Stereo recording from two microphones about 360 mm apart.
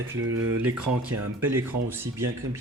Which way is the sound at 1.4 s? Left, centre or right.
Centre.